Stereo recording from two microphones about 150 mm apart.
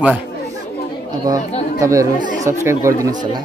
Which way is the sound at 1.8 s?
20° right (ahead or behind).